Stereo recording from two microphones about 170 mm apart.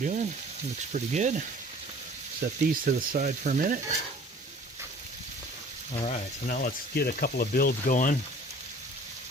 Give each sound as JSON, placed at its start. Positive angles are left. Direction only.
{"t": 0.0, "sound": "frying", "side_deg": -45}
{"t": 2.4, "sound": "speech", "side_deg": -70}
{"t": 2.8, "sound": "frying", "side_deg": -50}
{"t": 5.9, "sound": "speech", "side_deg": 35}
{"t": 6.5, "sound": "speech", "side_deg": 60}